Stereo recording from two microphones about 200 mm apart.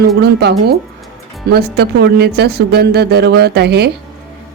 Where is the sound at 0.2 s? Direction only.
55° right (ahead or behind).